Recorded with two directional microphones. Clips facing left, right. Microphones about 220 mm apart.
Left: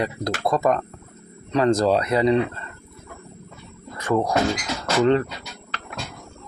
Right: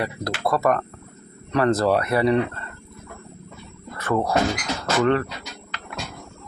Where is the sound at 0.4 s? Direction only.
15° left (ahead or behind).